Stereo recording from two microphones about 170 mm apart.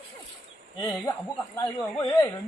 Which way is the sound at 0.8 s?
10° left (ahead or behind).